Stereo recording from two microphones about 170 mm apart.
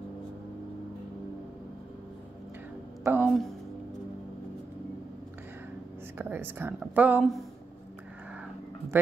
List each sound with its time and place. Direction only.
3.0 s a sound: 10° right (ahead or behind)
6.1 s speech: 10° right (ahead or behind)
8.9 s speech: 10° right (ahead or behind)